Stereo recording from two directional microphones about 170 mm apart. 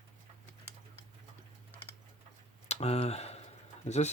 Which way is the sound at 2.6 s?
40° left (ahead or behind).